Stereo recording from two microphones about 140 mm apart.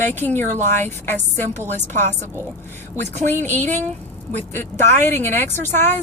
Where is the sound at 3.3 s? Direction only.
60° right (ahead or behind).